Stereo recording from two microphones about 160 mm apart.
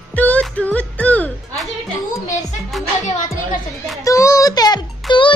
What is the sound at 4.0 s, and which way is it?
Speech, 20° left (ahead or behind).